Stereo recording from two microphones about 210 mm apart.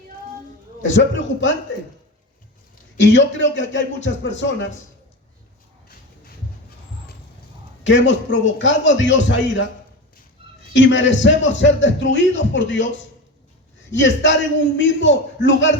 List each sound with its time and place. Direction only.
0.8 s speech: 60° left (ahead or behind)
3.0 s speech: 60° left (ahead or behind)
7.9 s speech: 60° left (ahead or behind)
10.8 s speech: 60° left (ahead or behind)
13.9 s speech: 60° left (ahead or behind)